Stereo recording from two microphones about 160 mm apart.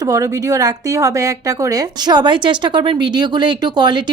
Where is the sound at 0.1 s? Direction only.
20° right (ahead or behind).